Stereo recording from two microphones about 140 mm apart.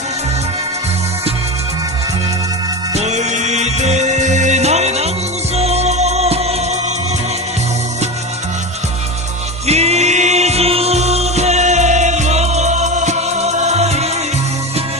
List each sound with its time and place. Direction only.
2.9 s music: 55° right (ahead or behind)
9.6 s music: 50° right (ahead or behind)